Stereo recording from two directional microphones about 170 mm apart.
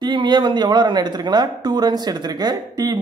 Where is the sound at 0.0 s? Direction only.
25° right (ahead or behind).